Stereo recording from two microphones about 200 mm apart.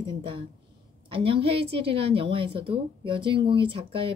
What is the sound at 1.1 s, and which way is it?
Speech, 25° right (ahead or behind).